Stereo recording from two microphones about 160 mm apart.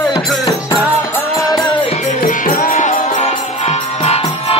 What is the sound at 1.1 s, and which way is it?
Music, 20° left (ahead or behind).